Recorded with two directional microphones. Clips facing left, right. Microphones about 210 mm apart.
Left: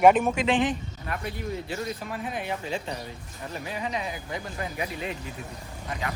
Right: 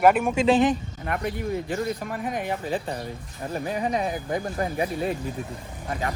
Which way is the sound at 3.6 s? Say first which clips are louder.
Right 6 dB; 45° right (ahead or behind).